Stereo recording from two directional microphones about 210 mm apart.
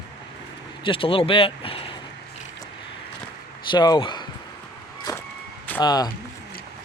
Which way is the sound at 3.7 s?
20° left (ahead or behind).